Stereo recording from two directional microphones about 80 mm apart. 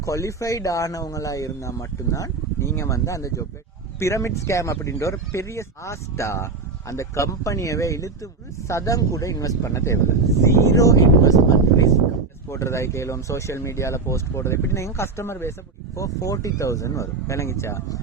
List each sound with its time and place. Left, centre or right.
0.0 s speech: left
12.5 s speech: left
16.0 s speech: left